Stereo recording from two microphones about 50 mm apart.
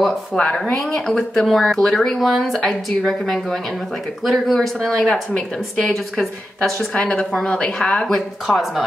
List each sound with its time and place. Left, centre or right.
0.3 s a woman's voice: centre
6.9 s speech: left
8.1 s speech: centre